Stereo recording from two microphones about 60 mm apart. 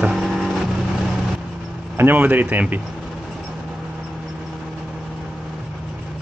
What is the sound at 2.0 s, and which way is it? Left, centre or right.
Speech, right.